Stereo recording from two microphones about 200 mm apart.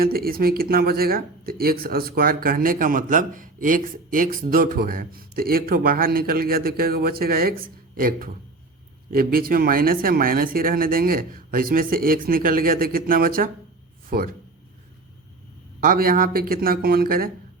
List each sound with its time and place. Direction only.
0.0 s speech: 50° right (ahead or behind)
15.8 s speech: 45° right (ahead or behind)